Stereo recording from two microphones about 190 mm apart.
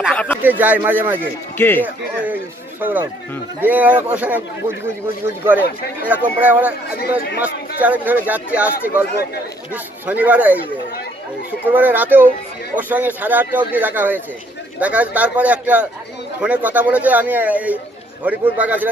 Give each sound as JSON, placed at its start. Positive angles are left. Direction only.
{"t": 0.1, "sound": "a sound", "side_deg": 5}
{"t": 0.4, "sound": "a man's voice", "side_deg": -10}
{"t": 1.6, "sound": "speech", "side_deg": 10}
{"t": 2.8, "sound": "a man's voice", "side_deg": -10}
{"t": 6.9, "sound": "speech", "side_deg": 55}
{"t": 7.8, "sound": "a man's voice", "side_deg": -10}
{"t": 10.0, "sound": "a man's voice", "side_deg": -10}
{"t": 11.6, "sound": "a man's voice", "side_deg": -10}